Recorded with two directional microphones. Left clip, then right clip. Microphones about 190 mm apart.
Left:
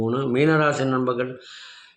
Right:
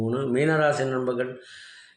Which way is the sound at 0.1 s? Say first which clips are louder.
Left 3 dB; 15° left (ahead or behind).